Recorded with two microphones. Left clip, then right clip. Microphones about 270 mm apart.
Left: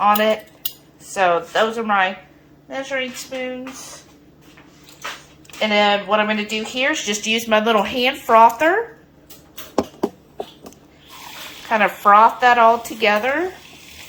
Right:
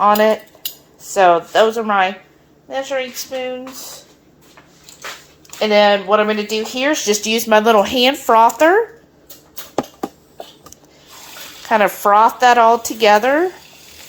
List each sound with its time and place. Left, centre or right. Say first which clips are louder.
0.0 s speech: right 3 dB; right
5.5 s speech: right 4 dB; right
11.7 s speech: right 1 dB; right